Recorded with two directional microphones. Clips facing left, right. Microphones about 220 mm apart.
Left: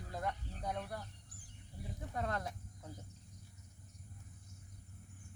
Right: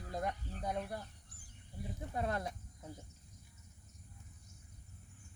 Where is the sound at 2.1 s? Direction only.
15° right (ahead or behind).